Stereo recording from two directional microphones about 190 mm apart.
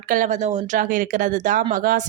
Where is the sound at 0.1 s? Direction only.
40° right (ahead or behind).